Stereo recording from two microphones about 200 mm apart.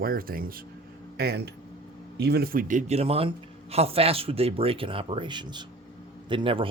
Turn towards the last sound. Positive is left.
turn(degrees=-25)  # may be behind; listen again after turning